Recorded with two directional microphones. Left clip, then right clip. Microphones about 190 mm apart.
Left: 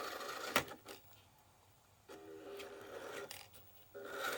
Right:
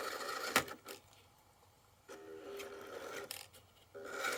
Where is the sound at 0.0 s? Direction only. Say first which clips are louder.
Right 3 dB; 15° right (ahead or behind).